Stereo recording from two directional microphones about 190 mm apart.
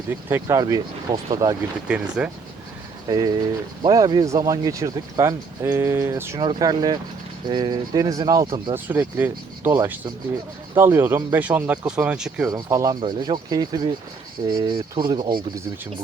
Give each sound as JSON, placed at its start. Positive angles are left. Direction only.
{"t": 0.1, "sound": "speech", "side_deg": -10}
{"t": 1.9, "sound": "speech", "side_deg": -5}
{"t": 3.8, "sound": "speech", "side_deg": -20}
{"t": 6.4, "sound": "speech", "side_deg": -25}
{"t": 8.7, "sound": "speech", "side_deg": -10}
{"t": 12.5, "sound": "speech", "side_deg": -20}